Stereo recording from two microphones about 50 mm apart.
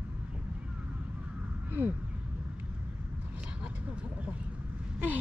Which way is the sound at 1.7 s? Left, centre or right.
Right.